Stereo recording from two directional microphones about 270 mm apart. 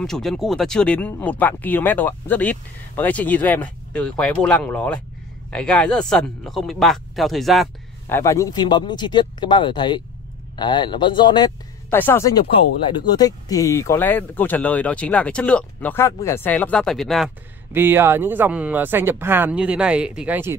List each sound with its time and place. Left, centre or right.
0.0 s speech: centre
8.2 s speech: centre